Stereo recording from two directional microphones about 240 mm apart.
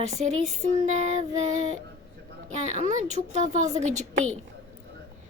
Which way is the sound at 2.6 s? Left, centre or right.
Right.